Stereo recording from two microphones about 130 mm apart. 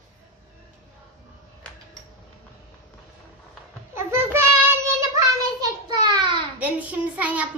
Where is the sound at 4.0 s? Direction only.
20° right (ahead or behind).